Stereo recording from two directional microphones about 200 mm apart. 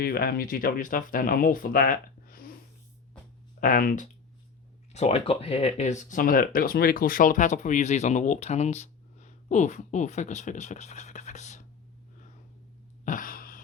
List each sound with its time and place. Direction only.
0.0 s speech: 50° left (ahead or behind)
3.6 s speech: 45° left (ahead or behind)
13.1 s a sound: 45° left (ahead or behind)